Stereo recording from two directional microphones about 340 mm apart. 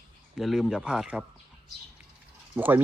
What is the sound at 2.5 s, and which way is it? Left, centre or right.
Speech, centre.